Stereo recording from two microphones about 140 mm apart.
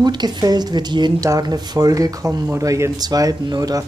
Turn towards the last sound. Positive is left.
turn(degrees=-25)  # may be behind; listen again after turning